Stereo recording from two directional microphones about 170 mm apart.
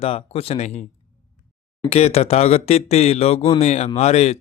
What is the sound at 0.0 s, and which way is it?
Speech, 35° left (ahead or behind).